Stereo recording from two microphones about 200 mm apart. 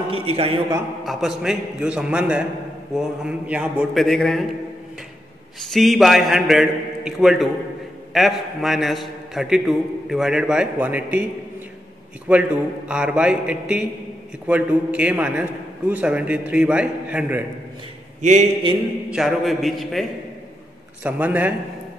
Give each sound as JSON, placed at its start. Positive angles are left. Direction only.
{"t": 0.1, "sound": "a man's voice", "side_deg": -30}
{"t": 1.0, "sound": "a man's voice", "side_deg": 0}
{"t": 5.6, "sound": "a man's voice", "side_deg": 0}
{"t": 12.3, "sound": "a man's voice", "side_deg": -5}
{"t": 18.2, "sound": "a man's voice", "side_deg": -35}
{"t": 19.0, "sound": "a man's voice", "side_deg": 0}